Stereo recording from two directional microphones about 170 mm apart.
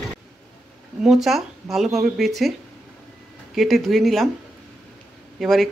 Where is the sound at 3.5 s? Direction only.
Centre (ahead or behind).